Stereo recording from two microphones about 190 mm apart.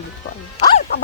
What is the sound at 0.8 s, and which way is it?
Speech, 55° left (ahead or behind).